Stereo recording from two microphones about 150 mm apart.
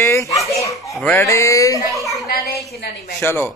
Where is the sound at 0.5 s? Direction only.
20° left (ahead or behind).